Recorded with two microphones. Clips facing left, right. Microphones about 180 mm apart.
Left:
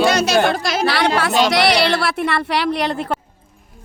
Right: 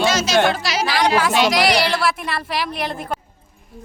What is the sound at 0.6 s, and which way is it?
A woman's voice, 50° left (ahead or behind).